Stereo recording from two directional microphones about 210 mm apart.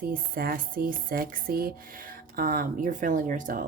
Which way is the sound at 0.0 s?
45° right (ahead or behind).